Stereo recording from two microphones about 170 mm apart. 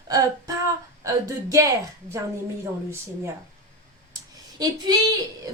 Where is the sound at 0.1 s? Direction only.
20° right (ahead or behind).